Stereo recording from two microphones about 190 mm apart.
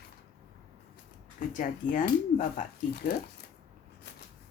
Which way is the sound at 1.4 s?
45° left (ahead or behind).